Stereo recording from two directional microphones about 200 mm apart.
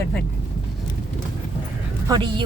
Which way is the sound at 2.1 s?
25° right (ahead or behind).